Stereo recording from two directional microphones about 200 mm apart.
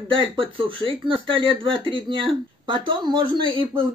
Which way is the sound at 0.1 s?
25° right (ahead or behind).